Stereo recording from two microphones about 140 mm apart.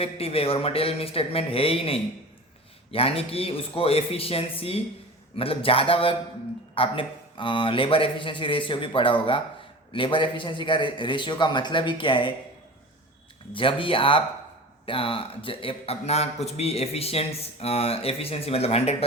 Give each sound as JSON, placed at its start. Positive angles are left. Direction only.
{"t": 0.0, "sound": "a man's voice", "side_deg": 45}
{"t": 13.5, "sound": "a man's voice", "side_deg": 35}